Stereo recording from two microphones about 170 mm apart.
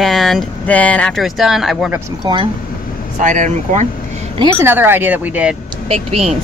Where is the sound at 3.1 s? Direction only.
50° right (ahead or behind).